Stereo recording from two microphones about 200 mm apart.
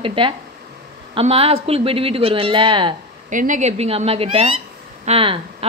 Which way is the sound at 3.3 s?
40° right (ahead or behind).